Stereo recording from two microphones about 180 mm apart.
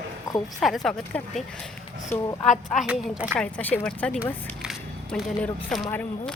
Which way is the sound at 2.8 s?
5° right (ahead or behind).